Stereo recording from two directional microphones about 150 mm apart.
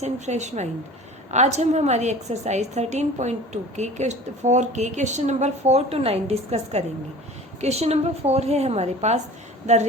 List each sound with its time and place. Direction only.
0.0 s a woman's voice: 50° right (ahead or behind)